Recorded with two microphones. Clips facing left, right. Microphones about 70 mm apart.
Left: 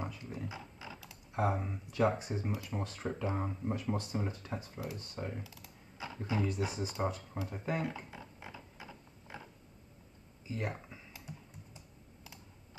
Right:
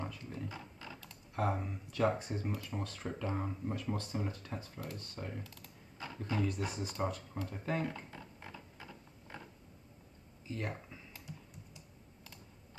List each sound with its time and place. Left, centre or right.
0.0 s typing: centre
2.8 s speech: centre
7.4 s mechanisms: centre
10.4 s computer keyboard: centre